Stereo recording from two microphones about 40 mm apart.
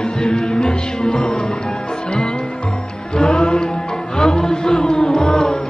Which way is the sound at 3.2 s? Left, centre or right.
Left.